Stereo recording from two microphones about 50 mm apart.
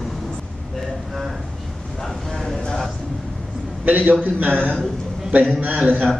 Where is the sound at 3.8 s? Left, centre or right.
Right.